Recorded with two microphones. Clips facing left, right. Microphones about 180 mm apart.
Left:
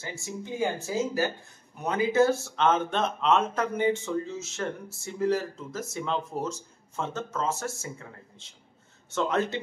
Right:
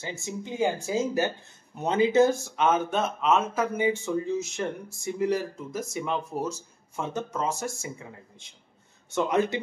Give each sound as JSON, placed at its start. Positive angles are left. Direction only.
{"t": 0.0, "sound": "speech", "side_deg": -20}